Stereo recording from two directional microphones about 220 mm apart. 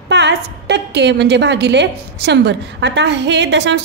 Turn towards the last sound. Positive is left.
turn(degrees=-55)  # may be behind; listen again after turning